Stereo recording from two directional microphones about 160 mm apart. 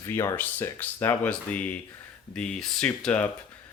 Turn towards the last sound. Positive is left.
turn(degrees=5)  # may be behind; listen again after turning